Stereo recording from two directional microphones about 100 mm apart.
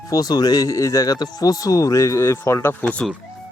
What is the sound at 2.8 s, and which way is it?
Speech, 10° left (ahead or behind).